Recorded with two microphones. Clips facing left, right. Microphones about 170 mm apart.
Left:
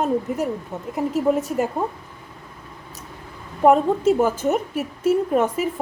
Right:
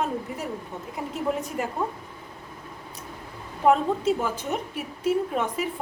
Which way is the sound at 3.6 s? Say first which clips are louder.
Left 5 dB; 50° left (ahead or behind).